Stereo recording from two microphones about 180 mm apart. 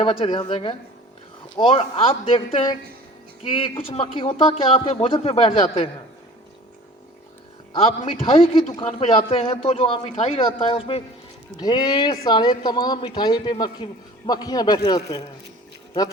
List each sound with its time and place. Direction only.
0.0 s a man's voice: 30° left (ahead or behind)
7.7 s a man's voice: 30° left (ahead or behind)